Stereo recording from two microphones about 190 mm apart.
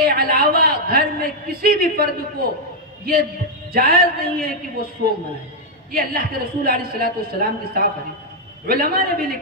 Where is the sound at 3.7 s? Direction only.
50° right (ahead or behind).